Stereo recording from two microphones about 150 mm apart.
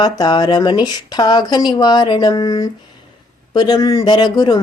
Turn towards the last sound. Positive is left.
turn(degrees=30)  # may be behind; listen again after turning